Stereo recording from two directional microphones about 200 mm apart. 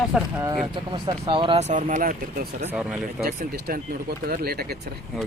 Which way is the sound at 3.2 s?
50° right (ahead or behind).